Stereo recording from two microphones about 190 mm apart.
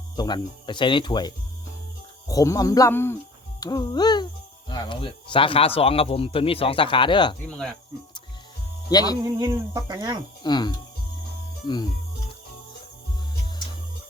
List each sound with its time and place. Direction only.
0.2 s speech: 20° left (ahead or behind)
2.3 s speech: 15° left (ahead or behind)
7.4 s cricket: 5° left (ahead or behind)
8.9 s speech: 20° left (ahead or behind)
9.2 s speech: 20° right (ahead or behind)
10.4 s speech: 20° left (ahead or behind)